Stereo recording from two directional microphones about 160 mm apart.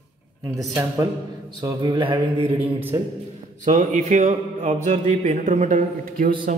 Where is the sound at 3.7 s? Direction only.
45° right (ahead or behind).